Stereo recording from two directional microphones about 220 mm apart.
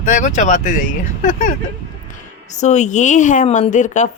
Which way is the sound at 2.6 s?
30° left (ahead or behind).